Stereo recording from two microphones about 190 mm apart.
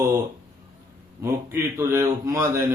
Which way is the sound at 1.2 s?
15° right (ahead or behind).